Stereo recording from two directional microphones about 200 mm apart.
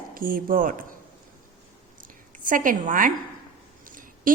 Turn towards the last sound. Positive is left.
turn(degrees=-45)  # may be behind; listen again after turning